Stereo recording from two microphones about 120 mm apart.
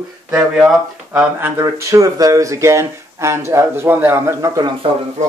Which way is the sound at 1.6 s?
25° right (ahead or behind).